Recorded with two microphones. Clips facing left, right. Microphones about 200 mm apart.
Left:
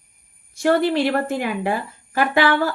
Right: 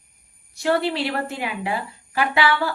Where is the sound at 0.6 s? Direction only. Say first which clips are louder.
Left 4 dB; 50° left (ahead or behind).